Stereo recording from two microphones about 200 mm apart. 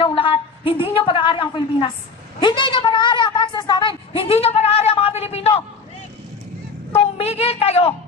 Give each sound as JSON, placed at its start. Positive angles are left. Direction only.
{"t": 0.0, "sound": "a woman's voice", "side_deg": 25}
{"t": 7.2, "sound": "speech", "side_deg": 30}